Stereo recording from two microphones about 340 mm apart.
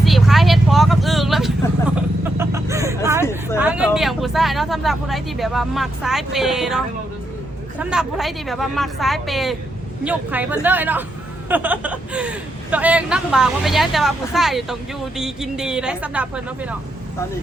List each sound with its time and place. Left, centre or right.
0.0 s vehicle: centre
3.6 s speech: centre